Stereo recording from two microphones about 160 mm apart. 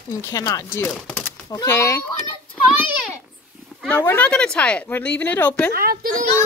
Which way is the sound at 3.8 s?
10° left (ahead or behind).